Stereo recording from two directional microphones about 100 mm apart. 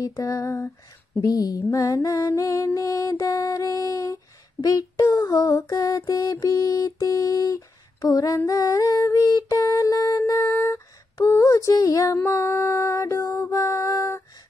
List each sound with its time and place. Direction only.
0.0 s music: 35° left (ahead or behind)
8.5 s a sound: 35° left (ahead or behind)
12.3 s music: 25° left (ahead or behind)